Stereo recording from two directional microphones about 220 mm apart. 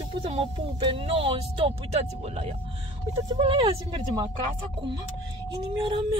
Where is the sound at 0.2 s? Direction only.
25° right (ahead or behind).